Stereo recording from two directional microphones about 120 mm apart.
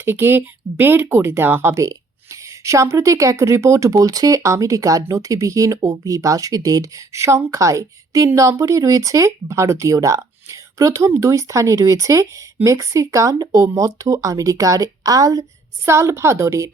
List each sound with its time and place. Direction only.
0.0 s speech: 20° right (ahead or behind)